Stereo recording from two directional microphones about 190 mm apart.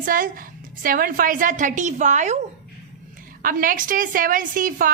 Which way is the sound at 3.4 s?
45° right (ahead or behind).